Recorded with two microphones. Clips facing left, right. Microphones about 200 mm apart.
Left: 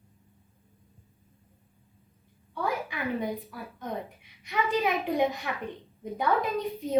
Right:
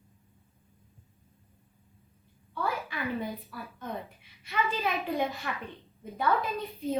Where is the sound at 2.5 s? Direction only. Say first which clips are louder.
Left 2 dB; 15° left (ahead or behind).